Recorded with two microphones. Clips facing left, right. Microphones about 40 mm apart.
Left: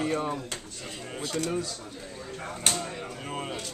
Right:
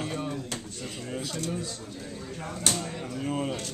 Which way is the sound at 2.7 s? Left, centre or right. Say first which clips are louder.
Right 1 dB; centre.